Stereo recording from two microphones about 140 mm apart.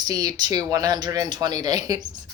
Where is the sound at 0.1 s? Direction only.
25° right (ahead or behind).